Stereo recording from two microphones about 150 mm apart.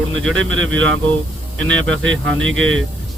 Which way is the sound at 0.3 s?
5° left (ahead or behind).